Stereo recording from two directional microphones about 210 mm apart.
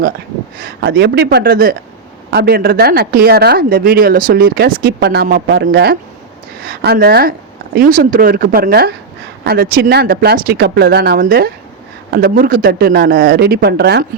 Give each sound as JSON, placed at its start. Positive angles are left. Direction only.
{"t": 0.6, "sound": "speech", "side_deg": -50}